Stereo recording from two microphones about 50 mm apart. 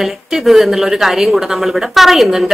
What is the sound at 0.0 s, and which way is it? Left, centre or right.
A woman's voice, centre.